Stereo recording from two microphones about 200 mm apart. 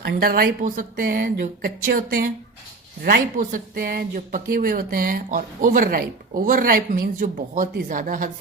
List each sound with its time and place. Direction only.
0.0 s speech: 50° right (ahead or behind)